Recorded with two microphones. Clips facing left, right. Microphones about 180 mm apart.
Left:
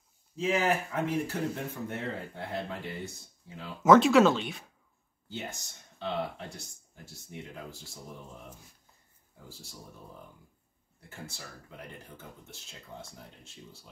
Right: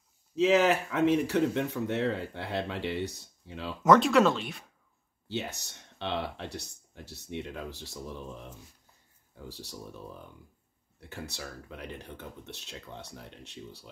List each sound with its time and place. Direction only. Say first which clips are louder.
0.4 s speech: right 5 dB; 75° right (ahead or behind)
3.8 s speech: left 2 dB; centre (ahead or behind)
5.3 s speech: right 4 dB; 70° right (ahead or behind)
9.5 s speech: right 6 dB; 70° right (ahead or behind)
11.0 s speech: right 5 dB; 70° right (ahead or behind)